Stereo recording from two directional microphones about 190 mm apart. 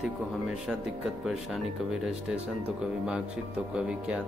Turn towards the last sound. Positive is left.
turn(degrees=-5)  # may be behind; listen again after turning